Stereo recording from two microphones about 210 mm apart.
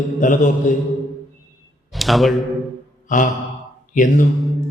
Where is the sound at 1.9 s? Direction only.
Centre (ahead or behind).